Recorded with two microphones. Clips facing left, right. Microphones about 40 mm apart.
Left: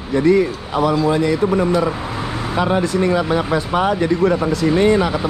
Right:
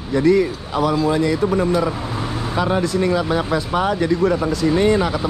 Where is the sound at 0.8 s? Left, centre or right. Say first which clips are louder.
Left 2 dB; left.